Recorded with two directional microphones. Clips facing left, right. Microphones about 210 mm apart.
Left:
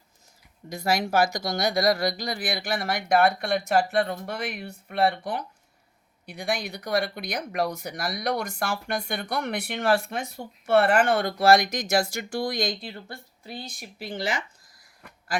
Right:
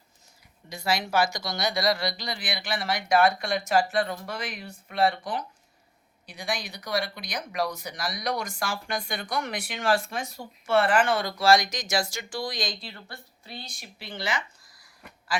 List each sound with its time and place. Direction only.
0.7 s speech: 50° left (ahead or behind)